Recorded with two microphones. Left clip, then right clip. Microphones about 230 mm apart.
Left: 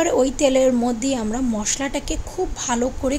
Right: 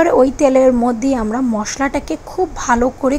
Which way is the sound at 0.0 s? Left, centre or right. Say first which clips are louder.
Right 6 dB; centre.